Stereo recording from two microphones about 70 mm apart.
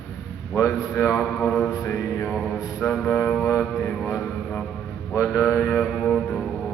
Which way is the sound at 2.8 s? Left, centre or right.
Left.